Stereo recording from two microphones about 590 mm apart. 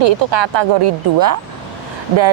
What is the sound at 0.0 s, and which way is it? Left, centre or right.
Speech, right.